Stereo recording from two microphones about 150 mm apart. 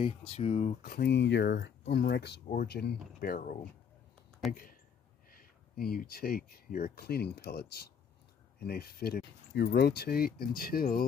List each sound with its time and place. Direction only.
0.3 s speech: 40° left (ahead or behind)
0.8 s speech: 85° left
5.4 s speech: 85° left